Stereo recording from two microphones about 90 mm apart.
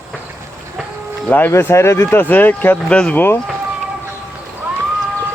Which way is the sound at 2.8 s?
10° left (ahead or behind).